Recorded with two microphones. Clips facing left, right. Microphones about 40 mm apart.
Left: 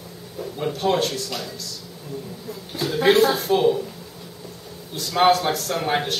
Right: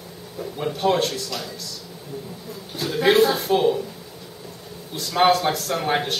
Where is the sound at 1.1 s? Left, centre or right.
Centre.